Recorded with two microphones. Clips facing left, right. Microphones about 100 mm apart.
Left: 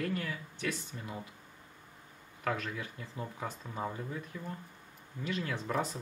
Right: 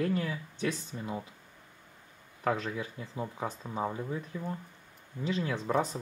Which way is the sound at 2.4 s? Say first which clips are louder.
Right 4 dB; 25° right (ahead or behind).